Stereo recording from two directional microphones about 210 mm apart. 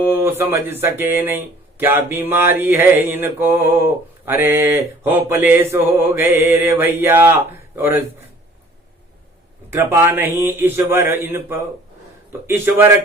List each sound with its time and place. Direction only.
0.0 s mantra: 10° right (ahead or behind)
9.6 s mantra: 10° right (ahead or behind)